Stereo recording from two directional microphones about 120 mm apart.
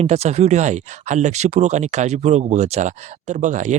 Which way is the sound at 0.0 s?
65° right (ahead or behind).